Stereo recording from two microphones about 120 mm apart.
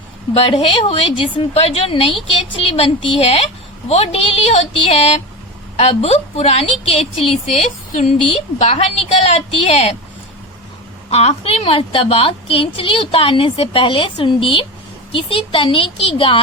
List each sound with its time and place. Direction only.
0.3 s a woman's voice: 50° left (ahead or behind); by 8.1 s 80° left
8.5 s a woman's voice: 60° left (ahead or behind)
11.1 s a woman's voice: 60° left (ahead or behind)